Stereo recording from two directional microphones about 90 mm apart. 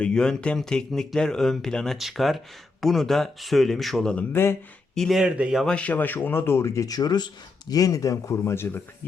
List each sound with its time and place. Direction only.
0.0 s speech: 10° left (ahead or behind)
4.3 s speech: 25° left (ahead or behind)
4.9 s speech: centre (ahead or behind)
5.6 s speech: 15° left (ahead or behind); by 8.8 s 30° left (ahead or behind)